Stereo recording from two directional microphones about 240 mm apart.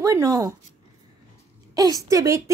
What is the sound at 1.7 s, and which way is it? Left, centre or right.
Speech, centre.